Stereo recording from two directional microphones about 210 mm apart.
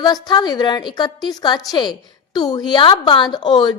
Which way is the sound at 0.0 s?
20° left (ahead or behind).